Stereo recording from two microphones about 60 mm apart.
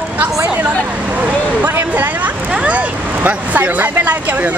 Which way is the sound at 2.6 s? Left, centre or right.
Right.